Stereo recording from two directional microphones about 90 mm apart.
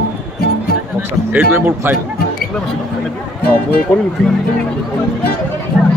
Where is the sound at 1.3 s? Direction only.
20° right (ahead or behind).